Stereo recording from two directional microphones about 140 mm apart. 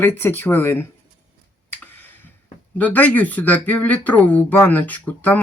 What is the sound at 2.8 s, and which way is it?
Speech, 10° left (ahead or behind).